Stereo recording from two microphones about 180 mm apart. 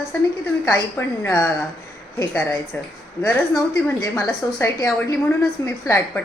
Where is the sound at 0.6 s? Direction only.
15° left (ahead or behind).